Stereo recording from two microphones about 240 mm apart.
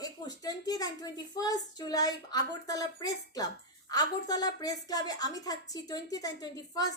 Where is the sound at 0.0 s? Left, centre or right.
Centre.